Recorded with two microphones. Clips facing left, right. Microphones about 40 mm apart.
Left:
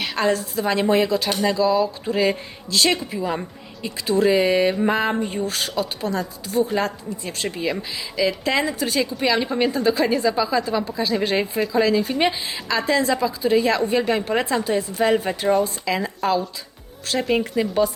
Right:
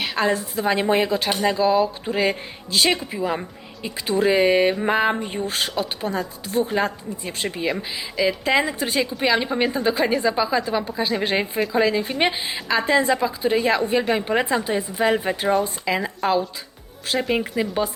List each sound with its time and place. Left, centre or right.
0.0 s a woman's voice: centre; by 6.7 s right
6.7 s a woman's voice: centre
13.6 s a woman's voice: centre